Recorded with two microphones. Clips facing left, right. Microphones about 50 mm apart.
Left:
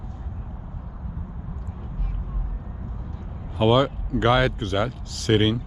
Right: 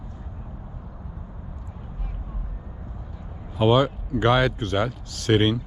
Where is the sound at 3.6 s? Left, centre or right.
Left.